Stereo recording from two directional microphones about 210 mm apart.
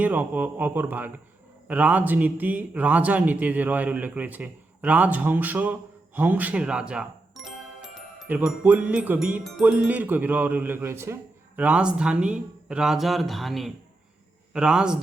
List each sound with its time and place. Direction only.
0.0 s a man's voice: 10° right (ahead or behind)